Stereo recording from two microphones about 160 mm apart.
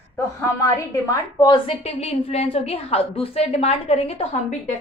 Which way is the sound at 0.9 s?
20° left (ahead or behind).